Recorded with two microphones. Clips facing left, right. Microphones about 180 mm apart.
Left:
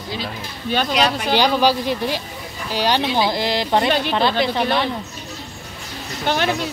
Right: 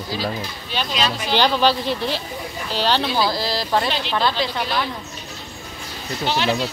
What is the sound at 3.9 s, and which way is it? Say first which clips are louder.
Speech: left 5 dB; 50° left (ahead or behind).